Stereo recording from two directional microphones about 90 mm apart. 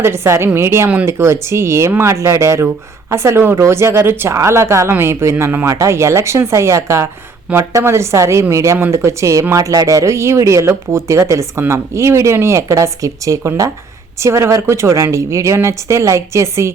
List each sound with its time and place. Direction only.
0.0 s a woman's voice: 30° right (ahead or behind)